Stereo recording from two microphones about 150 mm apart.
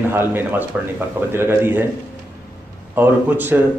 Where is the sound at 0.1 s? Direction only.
15° right (ahead or behind).